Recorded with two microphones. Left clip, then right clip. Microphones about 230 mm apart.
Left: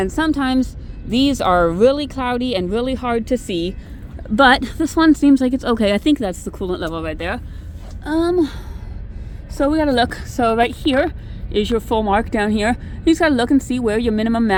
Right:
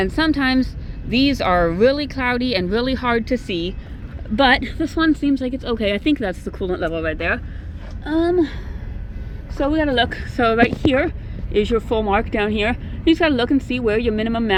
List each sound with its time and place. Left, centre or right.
0.0 s speech: centre
3.2 s speech: left
4.4 s speech: left
8.0 s speech: left
9.6 s speech: left
10.2 s speech: centre